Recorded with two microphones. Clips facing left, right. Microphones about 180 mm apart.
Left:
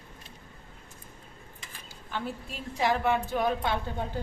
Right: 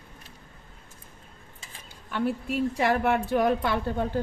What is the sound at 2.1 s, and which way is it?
A woman's voice, 65° right (ahead or behind).